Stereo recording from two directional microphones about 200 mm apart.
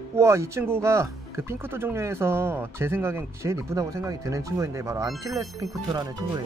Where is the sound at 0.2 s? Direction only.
15° right (ahead or behind).